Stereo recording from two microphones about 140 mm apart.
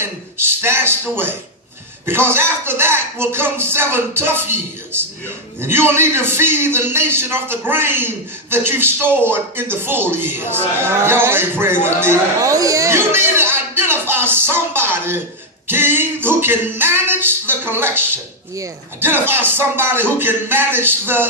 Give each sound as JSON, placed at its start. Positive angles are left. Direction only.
{"t": 0.3, "sound": "a man's voice", "side_deg": -15}